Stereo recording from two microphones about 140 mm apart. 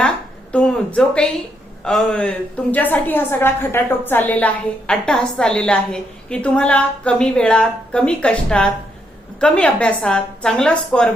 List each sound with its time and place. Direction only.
0.5 s a woman's voice: 5° left (ahead or behind)